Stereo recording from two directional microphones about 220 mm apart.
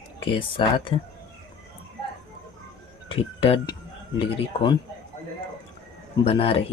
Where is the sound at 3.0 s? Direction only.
25° left (ahead or behind).